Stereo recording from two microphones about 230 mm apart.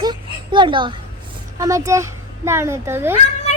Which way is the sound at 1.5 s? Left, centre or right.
Centre.